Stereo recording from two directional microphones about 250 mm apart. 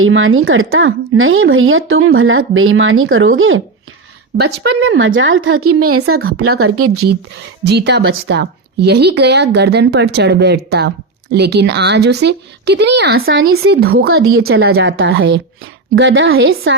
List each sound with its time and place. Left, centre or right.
0.0 s a woman's voice: right
6.1 s speech: right
6.6 s a woman's voice: right
7.6 s speech: right